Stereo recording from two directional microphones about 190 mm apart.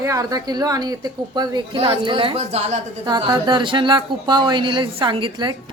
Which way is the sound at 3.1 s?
20° right (ahead or behind).